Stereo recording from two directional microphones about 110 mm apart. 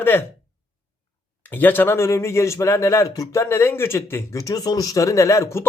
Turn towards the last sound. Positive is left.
turn(degrees=25)  # may be behind; listen again after turning